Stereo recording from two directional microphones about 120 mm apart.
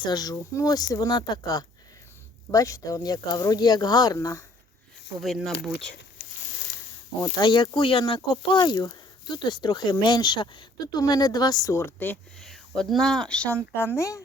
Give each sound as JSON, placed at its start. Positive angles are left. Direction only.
{"t": 0.0, "sound": "speech", "side_deg": 35}
{"t": 5.2, "sound": "speech", "side_deg": 0}
{"t": 7.2, "sound": "speech", "side_deg": 35}
{"t": 12.4, "sound": "speech", "side_deg": 5}
{"t": 13.7, "sound": "speech", "side_deg": 20}